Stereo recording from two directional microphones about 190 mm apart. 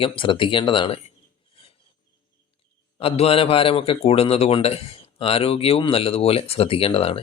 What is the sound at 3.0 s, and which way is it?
A man's voice, 30° left (ahead or behind).